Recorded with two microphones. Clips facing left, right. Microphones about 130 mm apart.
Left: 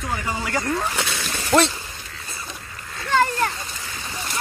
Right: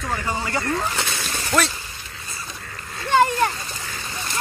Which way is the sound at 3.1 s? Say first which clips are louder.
Right 3 dB; 15° right (ahead or behind).